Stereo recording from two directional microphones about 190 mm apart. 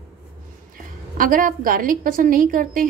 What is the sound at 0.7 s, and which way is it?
A woman's voice, 45° right (ahead or behind).